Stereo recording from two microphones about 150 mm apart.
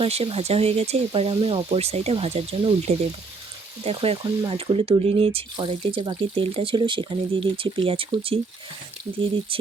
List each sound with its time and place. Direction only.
0.0 s speech: 40° right (ahead or behind)